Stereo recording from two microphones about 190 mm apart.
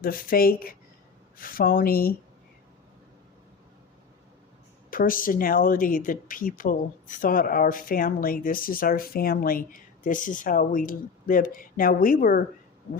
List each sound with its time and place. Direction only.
0.0 s speech: 50° left (ahead or behind)
4.9 s speech: 50° left (ahead or behind)